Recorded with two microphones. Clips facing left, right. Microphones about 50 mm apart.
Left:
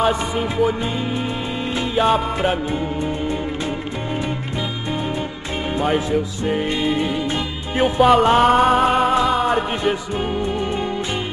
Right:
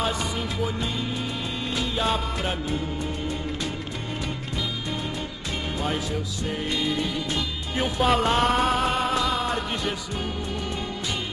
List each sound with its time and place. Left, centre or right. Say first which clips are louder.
0.6 s music: left 11 dB; left
5.8 s music: left 11 dB; left
8.0 s music: left 8 dB; centre; by 10.9 s left